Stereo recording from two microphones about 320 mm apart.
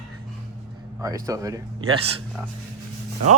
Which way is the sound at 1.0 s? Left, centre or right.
Centre.